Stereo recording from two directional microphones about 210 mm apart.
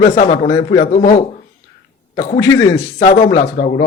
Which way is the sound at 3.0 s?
35° left (ahead or behind).